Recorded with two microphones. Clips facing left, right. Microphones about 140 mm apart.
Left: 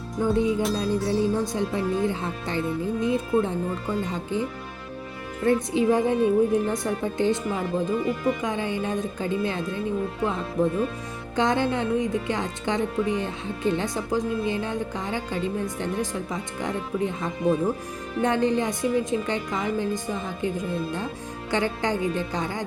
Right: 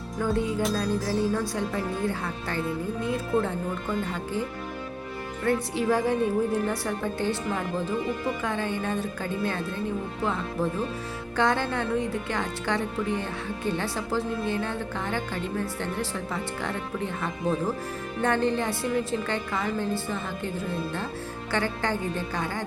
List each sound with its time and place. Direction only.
0.2 s speech: 20° left (ahead or behind)
5.5 s speech: 20° left (ahead or behind)